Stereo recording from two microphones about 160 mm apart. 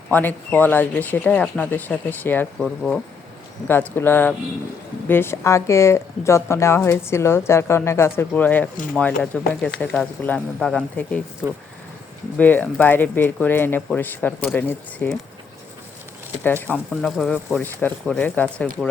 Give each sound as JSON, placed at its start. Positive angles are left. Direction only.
{"t": 0.1, "sound": "a woman's voice", "side_deg": 10}
{"t": 2.6, "sound": "speech", "side_deg": 0}
{"t": 3.7, "sound": "a woman's voice", "side_deg": 15}
{"t": 12.4, "sound": "a woman's voice", "side_deg": 10}
{"t": 16.7, "sound": "speech", "side_deg": 0}